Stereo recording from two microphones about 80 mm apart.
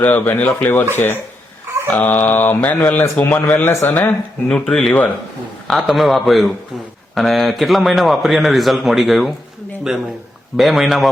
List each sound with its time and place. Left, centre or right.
0.0 s speech: left
4.4 s speech: centre
5.6 s a man's voice: centre
10.6 s a man's voice: centre